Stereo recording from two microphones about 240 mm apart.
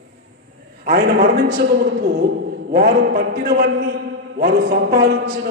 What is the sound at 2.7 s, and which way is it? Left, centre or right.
A man's voice, right.